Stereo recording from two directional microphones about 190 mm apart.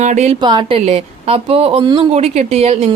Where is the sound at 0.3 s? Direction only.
25° right (ahead or behind).